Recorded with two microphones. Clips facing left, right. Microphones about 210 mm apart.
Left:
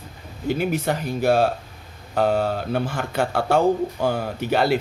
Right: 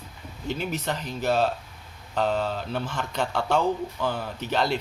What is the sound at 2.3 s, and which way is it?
Speech, 50° left (ahead or behind).